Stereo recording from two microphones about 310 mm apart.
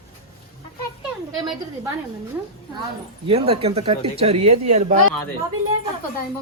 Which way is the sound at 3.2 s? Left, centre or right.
Centre.